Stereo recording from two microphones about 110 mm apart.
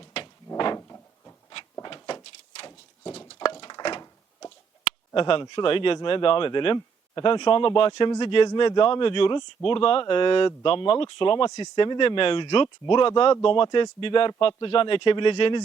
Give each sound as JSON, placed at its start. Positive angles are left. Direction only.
{"t": 0.5, "sound": "drawer open or close", "side_deg": 40}
{"t": 0.8, "sound": "cupboard open or close", "side_deg": 25}
{"t": 1.8, "sound": "door", "side_deg": 45}
{"t": 3.3, "sound": "a sound", "side_deg": 45}
{"t": 4.8, "sound": "speech", "side_deg": 55}
{"t": 6.7, "sound": "a sound", "side_deg": 35}
{"t": 7.3, "sound": "speech", "side_deg": 50}
{"t": 11.5, "sound": "speech", "side_deg": 40}